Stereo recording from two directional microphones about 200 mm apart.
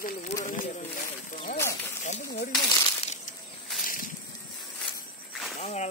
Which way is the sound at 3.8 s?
45° left (ahead or behind).